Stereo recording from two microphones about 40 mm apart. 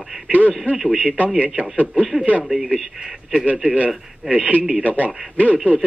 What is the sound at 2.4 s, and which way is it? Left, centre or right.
A man's voice, centre.